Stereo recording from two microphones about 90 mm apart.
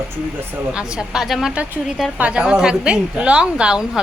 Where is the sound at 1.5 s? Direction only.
15° right (ahead or behind).